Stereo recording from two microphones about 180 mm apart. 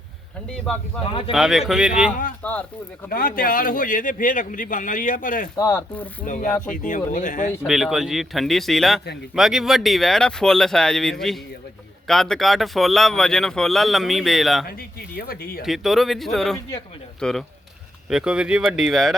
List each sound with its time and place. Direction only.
0.5 s speech: 5° left (ahead or behind)
2.4 s speech: 10° left (ahead or behind)
3.1 s a man's voice: 55° left (ahead or behind)
5.5 s speech: 20° left (ahead or behind)
6.2 s a man's voice: 45° left (ahead or behind)
7.7 s speech: centre (ahead or behind)
14.7 s speech: 60° left (ahead or behind)
15.6 s speech: centre (ahead or behind)